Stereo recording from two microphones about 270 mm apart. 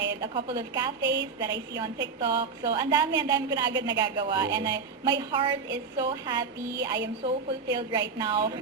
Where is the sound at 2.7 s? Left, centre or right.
Centre.